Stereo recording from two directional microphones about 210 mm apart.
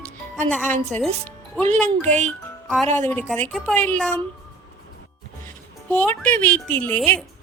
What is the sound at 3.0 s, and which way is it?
A woman's voice, 10° left (ahead or behind).